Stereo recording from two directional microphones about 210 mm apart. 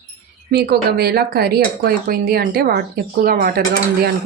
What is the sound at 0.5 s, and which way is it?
Speech, 50° right (ahead or behind).